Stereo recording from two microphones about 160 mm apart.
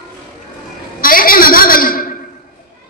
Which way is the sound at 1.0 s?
60° left (ahead or behind).